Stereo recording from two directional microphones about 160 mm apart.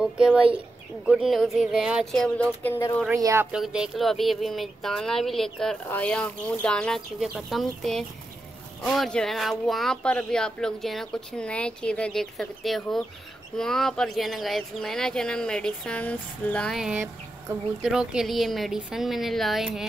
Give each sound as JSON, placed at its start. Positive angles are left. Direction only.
{"t": 0.0, "sound": "speech", "side_deg": -5}
{"t": 3.2, "sound": "speech", "side_deg": -20}
{"t": 3.5, "sound": "speech", "side_deg": -5}
{"t": 16.9, "sound": "speech", "side_deg": -15}
{"t": 17.8, "sound": "speech", "side_deg": -5}